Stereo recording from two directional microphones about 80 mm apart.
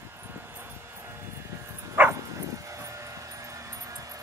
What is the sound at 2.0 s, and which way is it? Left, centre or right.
Bow-wow, right.